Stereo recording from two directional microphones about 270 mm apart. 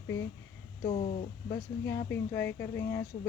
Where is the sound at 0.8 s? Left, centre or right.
Left.